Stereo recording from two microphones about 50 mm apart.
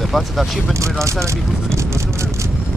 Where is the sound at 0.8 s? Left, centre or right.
Right.